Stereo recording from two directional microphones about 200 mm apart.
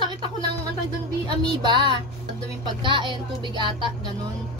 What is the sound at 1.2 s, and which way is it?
A woman's voice, 20° right (ahead or behind).